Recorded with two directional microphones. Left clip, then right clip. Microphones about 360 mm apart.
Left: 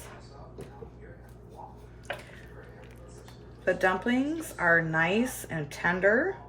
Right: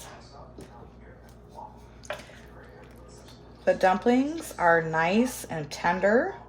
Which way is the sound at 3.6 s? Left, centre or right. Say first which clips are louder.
Right 4 dB; right.